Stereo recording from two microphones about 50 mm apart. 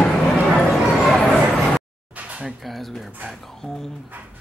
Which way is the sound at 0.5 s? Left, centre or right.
Centre.